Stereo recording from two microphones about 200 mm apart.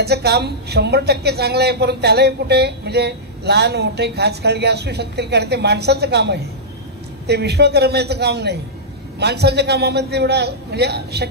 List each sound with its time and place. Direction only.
0.0 s a woman's voice: 55° right (ahead or behind)